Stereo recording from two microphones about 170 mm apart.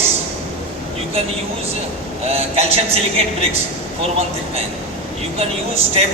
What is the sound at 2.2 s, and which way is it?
A man's voice, 35° right (ahead or behind).